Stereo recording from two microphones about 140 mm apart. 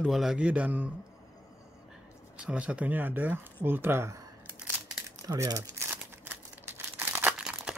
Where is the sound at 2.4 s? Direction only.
10° right (ahead or behind).